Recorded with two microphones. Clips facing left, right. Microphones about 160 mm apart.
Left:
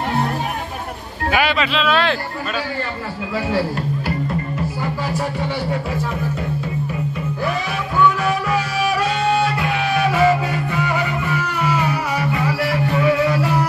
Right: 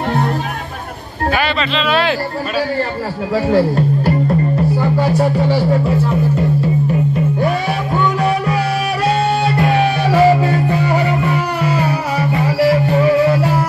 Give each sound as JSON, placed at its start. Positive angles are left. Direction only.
{"t": 1.3, "sound": "speech", "side_deg": 10}
{"t": 3.3, "sound": "speech", "side_deg": -40}
{"t": 4.9, "sound": "music", "side_deg": -40}
{"t": 7.4, "sound": "music", "side_deg": -35}
{"t": 9.6, "sound": "music", "side_deg": -40}